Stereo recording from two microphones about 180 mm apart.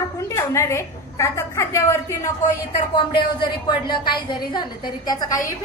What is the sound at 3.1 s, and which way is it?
A woman's voice, 25° left (ahead or behind).